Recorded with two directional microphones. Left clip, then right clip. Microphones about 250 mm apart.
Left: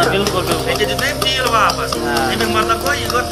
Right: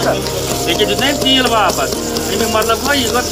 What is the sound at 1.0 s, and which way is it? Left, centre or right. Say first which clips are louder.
Speech: right 4 dB; right.